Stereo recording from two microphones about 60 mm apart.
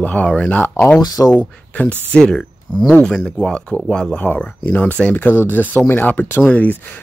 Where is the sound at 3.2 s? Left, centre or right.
Centre.